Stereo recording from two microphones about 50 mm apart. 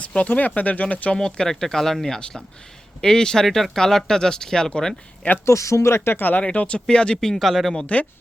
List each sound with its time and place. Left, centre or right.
0.3 s speech: left
1.1 s speech: centre
5.5 s speech: left
6.1 s speech: left
6.4 s speech: left
7.2 s speech: centre